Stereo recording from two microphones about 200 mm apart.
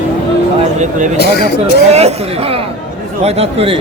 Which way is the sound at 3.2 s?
30° right (ahead or behind).